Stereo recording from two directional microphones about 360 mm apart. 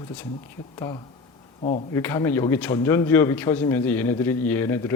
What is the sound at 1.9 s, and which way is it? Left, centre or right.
Speech, centre.